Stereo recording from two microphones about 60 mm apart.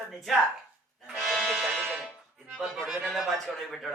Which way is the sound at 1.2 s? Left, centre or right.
Centre.